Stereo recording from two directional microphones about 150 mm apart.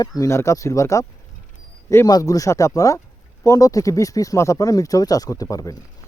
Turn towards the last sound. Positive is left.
turn(degrees=25)  # may be behind; listen again after turning